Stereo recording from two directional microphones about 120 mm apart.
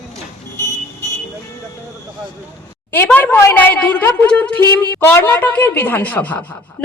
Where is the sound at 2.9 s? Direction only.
15° left (ahead or behind).